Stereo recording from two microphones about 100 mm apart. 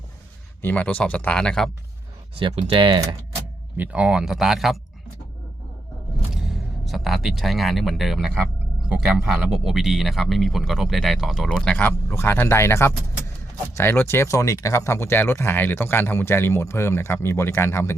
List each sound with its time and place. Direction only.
0.6 s speech: 15° left (ahead or behind)
2.4 s speech: 75° right (ahead or behind)
2.7 s speech: 55° right (ahead or behind)
3.8 s speech: 10° right (ahead or behind)
6.3 s speech: 5° right (ahead or behind); by 17.9 s 25° left (ahead or behind)